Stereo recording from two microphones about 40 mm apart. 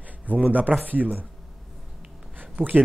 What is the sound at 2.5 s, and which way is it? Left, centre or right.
Speech, right.